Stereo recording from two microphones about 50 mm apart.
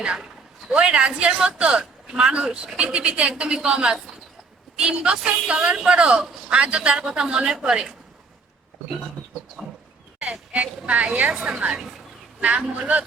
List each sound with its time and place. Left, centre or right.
0.0 s a woman's voice: centre
9.2 s a sound: centre
10.5 s a woman's voice: right; by 11.9 s centre
12.4 s a woman's voice: right